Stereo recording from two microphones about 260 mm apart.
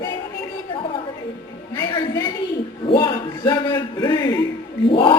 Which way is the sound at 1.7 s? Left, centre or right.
Centre.